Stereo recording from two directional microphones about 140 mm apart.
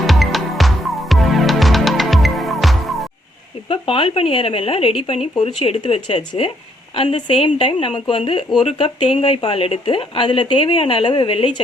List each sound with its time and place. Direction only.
0.0 s music: centre (ahead or behind)
3.7 s a woman's voice: 40° left (ahead or behind)